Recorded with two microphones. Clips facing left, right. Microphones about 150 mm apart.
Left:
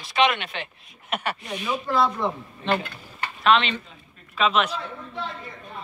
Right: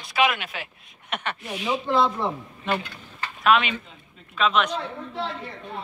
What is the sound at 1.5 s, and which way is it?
Speech, 15° right (ahead or behind).